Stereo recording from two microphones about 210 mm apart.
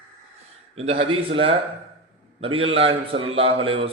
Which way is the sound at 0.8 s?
25° right (ahead or behind).